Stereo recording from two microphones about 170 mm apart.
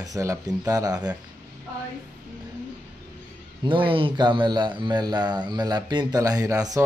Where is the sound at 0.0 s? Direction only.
20° right (ahead or behind).